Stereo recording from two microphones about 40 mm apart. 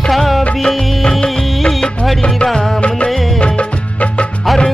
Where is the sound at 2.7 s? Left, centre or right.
Left.